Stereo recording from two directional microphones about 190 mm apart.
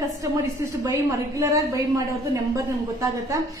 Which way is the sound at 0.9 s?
15° right (ahead or behind).